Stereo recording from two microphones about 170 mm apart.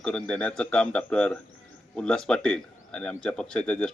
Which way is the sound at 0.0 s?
5° left (ahead or behind).